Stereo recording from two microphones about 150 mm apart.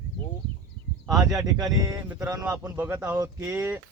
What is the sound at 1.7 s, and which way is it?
Speech, 25° right (ahead or behind).